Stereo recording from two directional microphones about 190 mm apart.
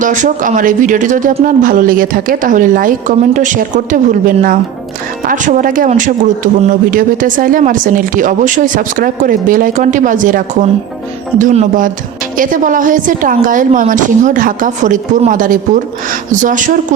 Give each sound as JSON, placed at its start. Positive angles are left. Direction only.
{"t": 0.0, "sound": "speech", "side_deg": -40}